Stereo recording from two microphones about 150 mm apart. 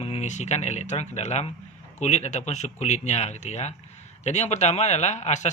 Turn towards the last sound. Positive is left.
turn(degrees=50)  # may be behind; listen again after turning